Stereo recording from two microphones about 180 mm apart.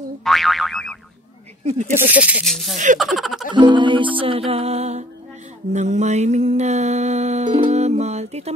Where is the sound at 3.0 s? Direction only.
Centre (ahead or behind).